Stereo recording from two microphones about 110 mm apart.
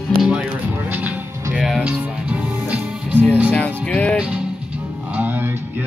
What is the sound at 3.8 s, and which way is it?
Music, 10° left (ahead or behind).